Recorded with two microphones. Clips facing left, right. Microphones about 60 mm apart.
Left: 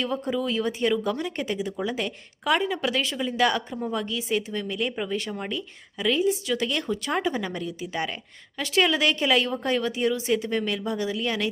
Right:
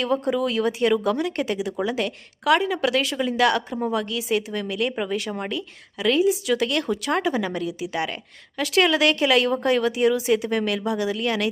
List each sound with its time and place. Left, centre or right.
0.0 s speech: centre